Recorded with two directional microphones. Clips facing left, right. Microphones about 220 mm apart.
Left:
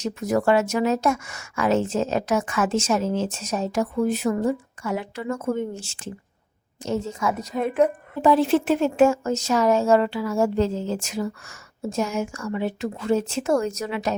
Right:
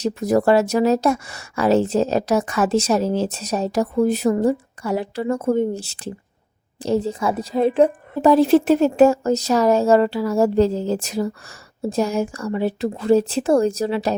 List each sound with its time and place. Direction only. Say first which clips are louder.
0.0 s a woman's voice: right 4 dB; 35° right (ahead or behind)